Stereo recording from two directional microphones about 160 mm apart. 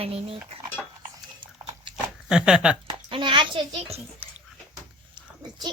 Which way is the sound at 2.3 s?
5° right (ahead or behind).